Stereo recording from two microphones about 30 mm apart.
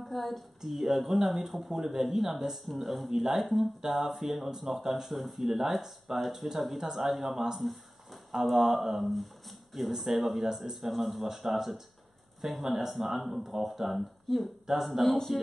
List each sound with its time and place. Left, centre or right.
0.0 s a sound: centre
0.7 s speech: centre
3.1 s speech: centre
6.8 s speech: centre
7.1 s speech: centre
9.0 s speech: centre